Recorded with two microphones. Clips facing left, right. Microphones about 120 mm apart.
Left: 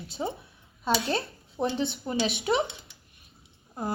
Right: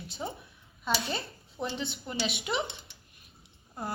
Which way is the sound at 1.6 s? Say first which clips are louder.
Left 7 dB; 30° left (ahead or behind).